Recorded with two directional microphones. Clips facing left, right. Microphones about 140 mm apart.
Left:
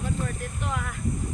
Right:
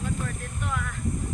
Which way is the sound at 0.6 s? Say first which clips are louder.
Even; 30° left (ahead or behind).